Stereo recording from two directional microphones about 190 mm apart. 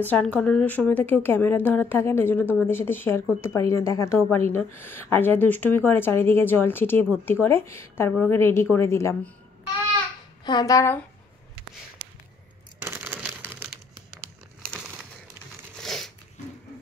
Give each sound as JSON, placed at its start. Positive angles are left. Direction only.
{"t": 0.0, "sound": "speech", "side_deg": 10}
{"t": 10.4, "sound": "speech", "side_deg": 20}
{"t": 12.8, "sound": "crumpling", "side_deg": -10}
{"t": 15.8, "sound": "a sound", "side_deg": 0}